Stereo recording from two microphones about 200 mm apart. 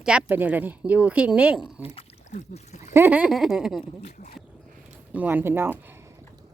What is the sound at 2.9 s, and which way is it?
Speech, 10° right (ahead or behind).